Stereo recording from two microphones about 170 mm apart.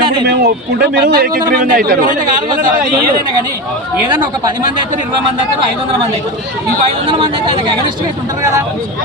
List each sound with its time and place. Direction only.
0.3 s speech: 70° right (ahead or behind); by 2.1 s 55° right (ahead or behind)
4.1 s speech: 25° right (ahead or behind)
6.8 s speech: 30° right (ahead or behind)